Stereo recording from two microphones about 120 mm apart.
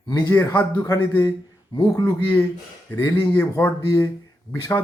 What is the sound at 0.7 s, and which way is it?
Speech, 30° left (ahead or behind).